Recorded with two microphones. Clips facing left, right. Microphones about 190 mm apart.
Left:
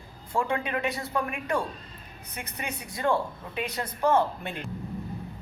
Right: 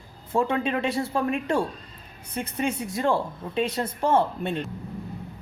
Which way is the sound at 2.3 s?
30° right (ahead or behind).